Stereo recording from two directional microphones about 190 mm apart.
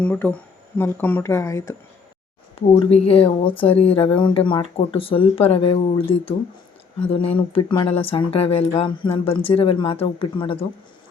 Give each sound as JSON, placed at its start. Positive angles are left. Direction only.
{"t": 0.0, "sound": "speech", "side_deg": 10}
{"t": 2.6, "sound": "speech", "side_deg": 30}